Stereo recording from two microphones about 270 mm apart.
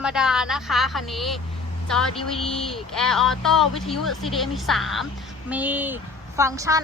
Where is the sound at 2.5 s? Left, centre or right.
Centre.